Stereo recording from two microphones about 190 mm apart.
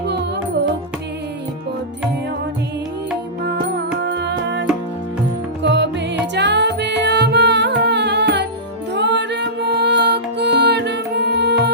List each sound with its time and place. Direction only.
0.0 s music: 65° right (ahead or behind)
3.4 s music: 60° right (ahead or behind)
5.6 s music: 65° right (ahead or behind)